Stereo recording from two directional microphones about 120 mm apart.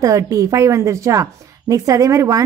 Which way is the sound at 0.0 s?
30° right (ahead or behind).